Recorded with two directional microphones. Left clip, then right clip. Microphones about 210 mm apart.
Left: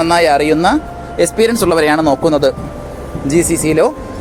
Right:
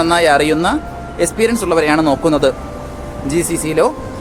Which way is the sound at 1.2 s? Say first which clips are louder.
Left 3 dB; 30° left (ahead or behind).